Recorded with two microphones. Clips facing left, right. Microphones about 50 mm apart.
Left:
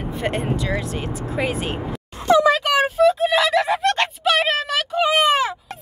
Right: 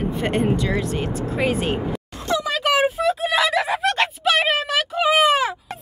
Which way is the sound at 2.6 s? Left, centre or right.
Centre.